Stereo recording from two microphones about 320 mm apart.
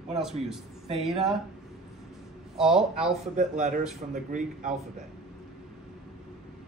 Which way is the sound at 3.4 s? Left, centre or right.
Right.